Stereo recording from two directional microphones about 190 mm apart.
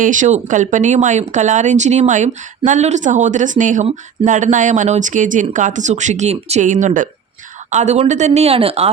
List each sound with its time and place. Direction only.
0.0 s speech: 40° right (ahead or behind)